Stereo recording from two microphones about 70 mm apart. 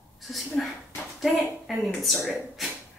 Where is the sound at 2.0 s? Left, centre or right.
Centre.